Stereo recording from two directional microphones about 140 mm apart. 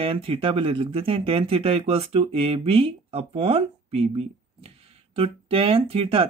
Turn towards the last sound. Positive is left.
turn(degrees=-40)  # may be behind; listen again after turning